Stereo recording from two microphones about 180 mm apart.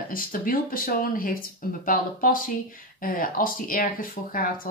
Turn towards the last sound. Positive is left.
turn(degrees=50)  # may be behind; listen again after turning